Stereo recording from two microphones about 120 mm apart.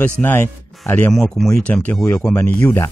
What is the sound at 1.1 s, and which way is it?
Speech, centre (ahead or behind).